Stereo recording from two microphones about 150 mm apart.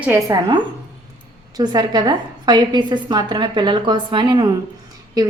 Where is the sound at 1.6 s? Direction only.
30° right (ahead or behind).